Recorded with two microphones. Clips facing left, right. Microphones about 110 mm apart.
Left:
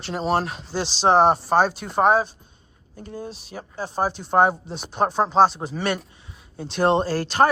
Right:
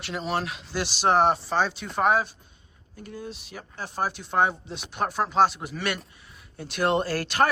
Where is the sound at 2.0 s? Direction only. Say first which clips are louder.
Left 4 dB; 30° left (ahead or behind).